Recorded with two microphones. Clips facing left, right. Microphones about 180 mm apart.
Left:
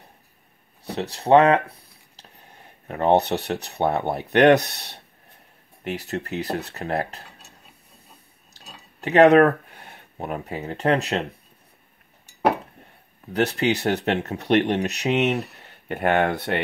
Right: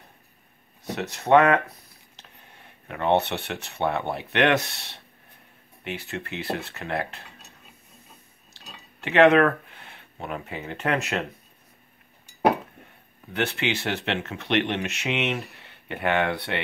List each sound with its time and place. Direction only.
0.8 s speech: 35° left (ahead or behind)
9.0 s speech: 40° left (ahead or behind)
13.3 s speech: 40° left (ahead or behind)